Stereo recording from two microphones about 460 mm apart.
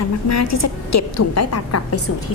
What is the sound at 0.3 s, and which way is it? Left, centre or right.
A woman's voice, left.